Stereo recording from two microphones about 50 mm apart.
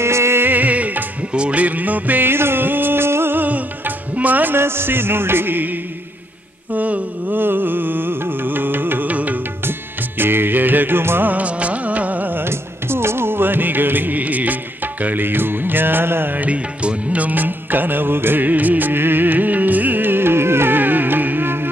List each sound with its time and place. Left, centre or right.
0.0 s music: right
0.4 s music: right
3.3 s music: right
4.6 s music: right
9.1 s music: right
9.7 s music: right
11.3 s music: right
12.4 s music: right
16.3 s music: right